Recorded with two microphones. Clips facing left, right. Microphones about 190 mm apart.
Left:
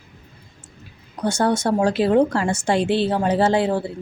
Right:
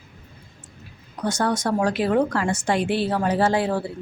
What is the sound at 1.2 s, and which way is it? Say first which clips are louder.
Speech: left 3 dB; 25° left (ahead or behind).